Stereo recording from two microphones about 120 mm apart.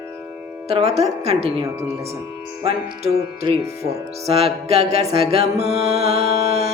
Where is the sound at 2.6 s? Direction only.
60° right (ahead or behind).